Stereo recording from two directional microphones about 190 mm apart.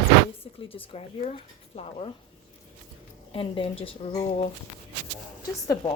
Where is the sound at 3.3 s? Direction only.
30° left (ahead or behind).